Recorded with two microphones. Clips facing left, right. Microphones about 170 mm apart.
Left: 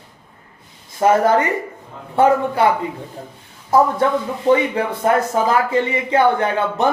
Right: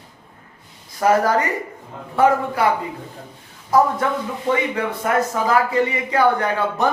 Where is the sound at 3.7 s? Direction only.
25° left (ahead or behind).